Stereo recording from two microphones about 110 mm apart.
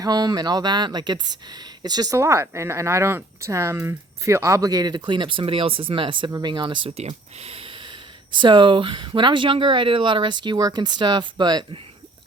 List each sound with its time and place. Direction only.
0.0 s speech: 35° right (ahead or behind)
2.1 s speech: 25° right (ahead or behind); by 6.9 s 45° right (ahead or behind)
7.3 s a sound: 65° right (ahead or behind)
8.4 s speech: 45° right (ahead or behind)